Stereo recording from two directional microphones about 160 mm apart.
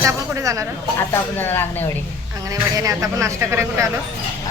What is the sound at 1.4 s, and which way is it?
Speech, 15° left (ahead or behind).